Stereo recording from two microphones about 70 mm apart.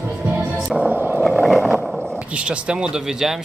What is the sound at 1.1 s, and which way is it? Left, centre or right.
Vehicle, centre.